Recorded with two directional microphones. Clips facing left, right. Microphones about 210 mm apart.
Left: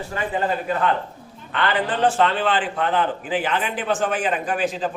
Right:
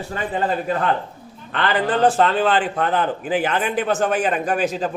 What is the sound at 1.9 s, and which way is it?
A man's voice, 40° right (ahead or behind).